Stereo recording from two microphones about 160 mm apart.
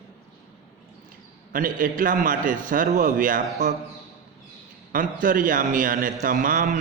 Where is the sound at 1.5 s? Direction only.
60° right (ahead or behind).